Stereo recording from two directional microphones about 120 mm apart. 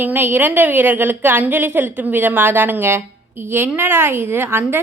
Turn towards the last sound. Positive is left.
turn(degrees=-20)  # may be behind; listen again after turning